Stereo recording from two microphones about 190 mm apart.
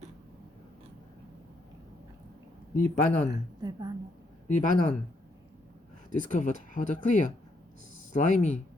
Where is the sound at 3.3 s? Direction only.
20° right (ahead or behind).